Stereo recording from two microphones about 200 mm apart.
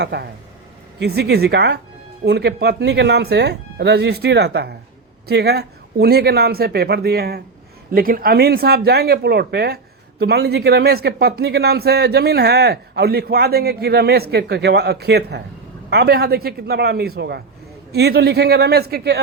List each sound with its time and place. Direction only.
0.0 s speech: 55° right (ahead or behind)